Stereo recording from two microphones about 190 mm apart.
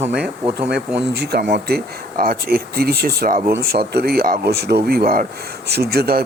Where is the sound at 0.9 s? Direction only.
60° right (ahead or behind).